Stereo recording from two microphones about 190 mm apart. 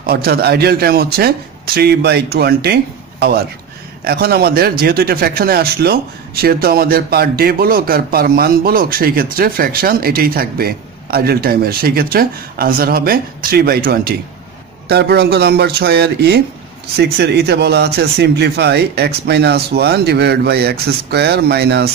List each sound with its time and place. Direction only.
0.0 s speech: 55° right (ahead or behind)